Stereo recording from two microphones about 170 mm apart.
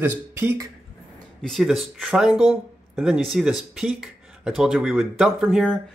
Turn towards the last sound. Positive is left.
turn(degrees=0)  # may be behind; listen again after turning